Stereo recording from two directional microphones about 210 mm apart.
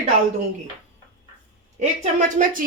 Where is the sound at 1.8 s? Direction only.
35° right (ahead or behind).